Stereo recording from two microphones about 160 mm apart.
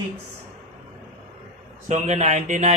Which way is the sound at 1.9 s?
45° right (ahead or behind).